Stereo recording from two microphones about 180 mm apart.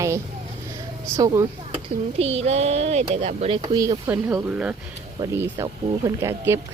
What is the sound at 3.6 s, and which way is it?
Speech, 20° right (ahead or behind).